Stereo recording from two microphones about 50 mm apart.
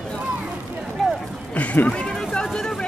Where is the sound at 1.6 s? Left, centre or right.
Left.